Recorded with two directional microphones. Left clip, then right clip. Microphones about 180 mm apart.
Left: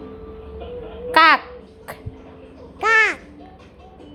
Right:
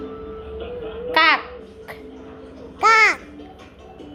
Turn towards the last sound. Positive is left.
turn(degrees=20)  # may be behind; listen again after turning